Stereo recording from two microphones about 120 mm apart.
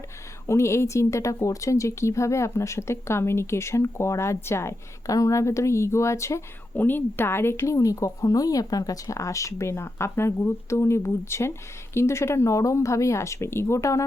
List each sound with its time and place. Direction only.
0.4 s speech: 25° left (ahead or behind)